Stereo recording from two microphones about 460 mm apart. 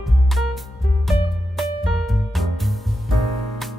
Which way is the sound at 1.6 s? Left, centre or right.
Centre.